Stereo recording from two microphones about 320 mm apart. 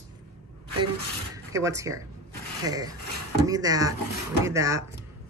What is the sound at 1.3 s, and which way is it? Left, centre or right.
A woman's voice, centre.